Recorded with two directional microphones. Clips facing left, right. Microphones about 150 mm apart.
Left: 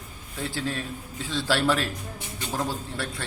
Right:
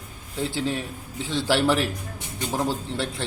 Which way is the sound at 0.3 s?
20° right (ahead or behind).